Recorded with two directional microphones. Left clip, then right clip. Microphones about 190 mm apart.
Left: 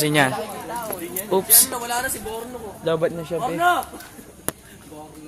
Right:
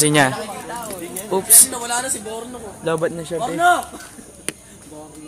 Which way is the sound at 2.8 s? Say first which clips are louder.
Right 1 dB; 10° right (ahead or behind).